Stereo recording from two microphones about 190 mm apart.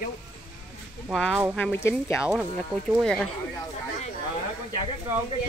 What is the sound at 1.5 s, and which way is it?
Speech, 10° left (ahead or behind).